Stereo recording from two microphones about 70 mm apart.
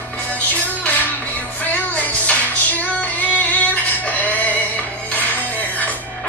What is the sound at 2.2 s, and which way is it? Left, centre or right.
Female singing, left.